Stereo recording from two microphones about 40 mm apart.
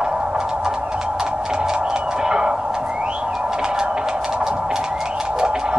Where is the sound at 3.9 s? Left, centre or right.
Centre.